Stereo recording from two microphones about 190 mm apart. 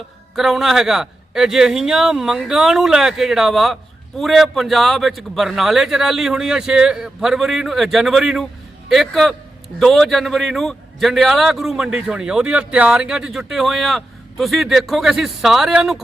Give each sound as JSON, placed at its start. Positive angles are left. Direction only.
{"t": 0.3, "sound": "a man's voice", "side_deg": 0}